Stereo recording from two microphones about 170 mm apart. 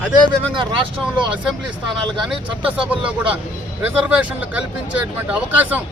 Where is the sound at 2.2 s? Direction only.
5° right (ahead or behind).